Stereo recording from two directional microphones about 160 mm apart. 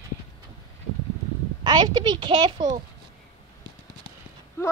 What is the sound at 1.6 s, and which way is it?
A woman's voice, 25° right (ahead or behind).